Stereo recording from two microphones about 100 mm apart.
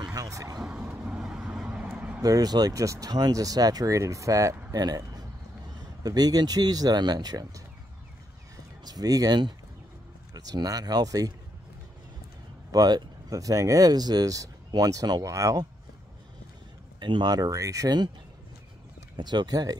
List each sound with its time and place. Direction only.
0.0 s vehicle: 40° right (ahead or behind)
0.6 s vehicle: 5° right (ahead or behind)
2.2 s speech: 40° right (ahead or behind)
6.0 s speech: 40° right (ahead or behind)
8.8 s speech: 40° right (ahead or behind)
12.7 s speech: 40° right (ahead or behind)
17.0 s speech: 45° right (ahead or behind)
19.1 s speech: 45° right (ahead or behind)